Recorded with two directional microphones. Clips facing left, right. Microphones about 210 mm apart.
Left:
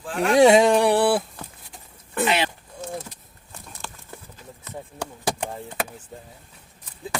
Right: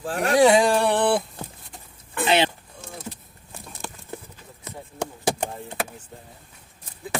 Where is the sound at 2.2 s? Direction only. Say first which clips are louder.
Right 2 dB; 30° right (ahead or behind).